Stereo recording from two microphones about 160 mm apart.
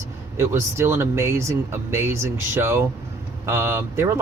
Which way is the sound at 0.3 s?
15° right (ahead or behind).